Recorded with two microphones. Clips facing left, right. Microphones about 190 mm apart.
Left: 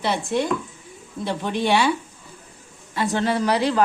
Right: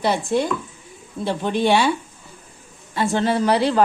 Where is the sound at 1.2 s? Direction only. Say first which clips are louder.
Right 3 dB; 30° right (ahead or behind).